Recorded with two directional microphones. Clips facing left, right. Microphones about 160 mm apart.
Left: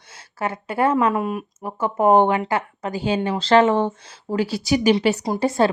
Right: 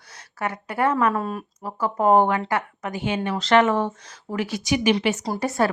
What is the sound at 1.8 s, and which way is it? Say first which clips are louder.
Speech: left 2 dB; 25° left (ahead or behind).